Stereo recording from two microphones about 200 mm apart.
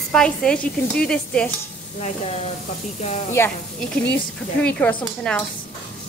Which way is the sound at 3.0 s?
35° left (ahead or behind).